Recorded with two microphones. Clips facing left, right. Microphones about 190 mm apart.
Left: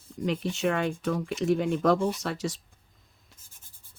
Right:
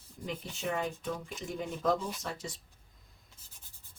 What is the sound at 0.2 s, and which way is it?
Speech, 80° left.